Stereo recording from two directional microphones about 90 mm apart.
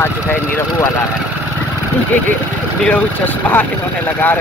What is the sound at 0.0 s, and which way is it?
Speech, 25° left (ahead or behind).